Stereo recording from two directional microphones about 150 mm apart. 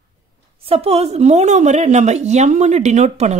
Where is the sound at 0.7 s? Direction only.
40° right (ahead or behind).